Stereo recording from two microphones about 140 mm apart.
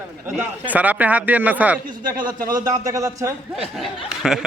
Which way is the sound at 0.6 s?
10° right (ahead or behind).